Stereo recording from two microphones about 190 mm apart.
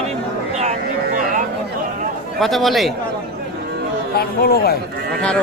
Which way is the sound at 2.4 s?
Centre (ahead or behind).